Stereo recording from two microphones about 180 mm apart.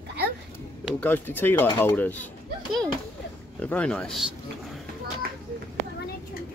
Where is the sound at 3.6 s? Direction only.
5° left (ahead or behind).